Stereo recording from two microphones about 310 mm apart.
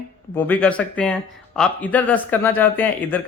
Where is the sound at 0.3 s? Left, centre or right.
Centre.